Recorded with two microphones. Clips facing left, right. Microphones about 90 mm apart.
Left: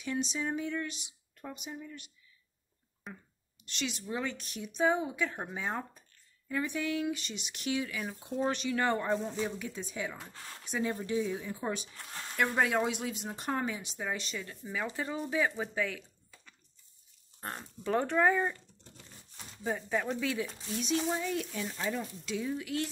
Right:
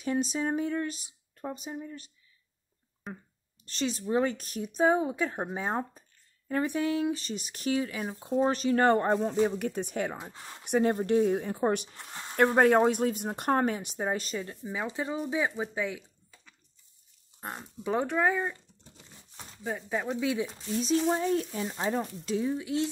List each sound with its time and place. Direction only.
0.2 s speech: 40° right (ahead or behind)
3.1 s speech: centre (ahead or behind)
3.6 s speech: 35° right (ahead or behind); by 16.0 s 15° right (ahead or behind)
17.4 s speech: 10° right (ahead or behind)
19.9 s speech: 15° right (ahead or behind)
20.7 s speech: 30° right (ahead or behind)